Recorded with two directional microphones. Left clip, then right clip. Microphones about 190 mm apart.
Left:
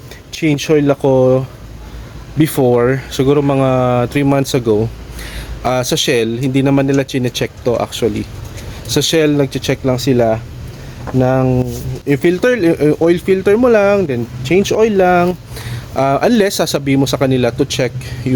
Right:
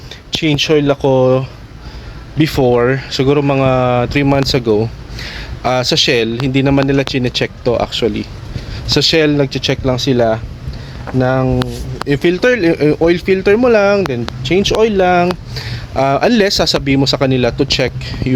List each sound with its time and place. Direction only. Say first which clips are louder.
0.3 s speech: right 1 dB; 20° left (ahead or behind)
11.7 s a sound: even; 15° left (ahead or behind)
12.3 s speech: right 1 dB; 5° left (ahead or behind)